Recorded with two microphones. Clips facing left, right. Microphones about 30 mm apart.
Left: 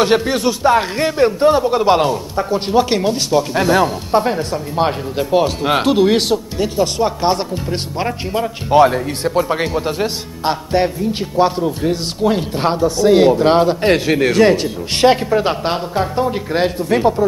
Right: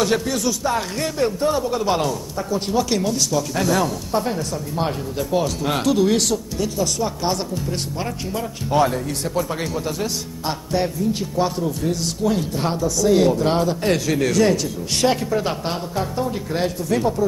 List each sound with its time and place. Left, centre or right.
0.0 s speech: left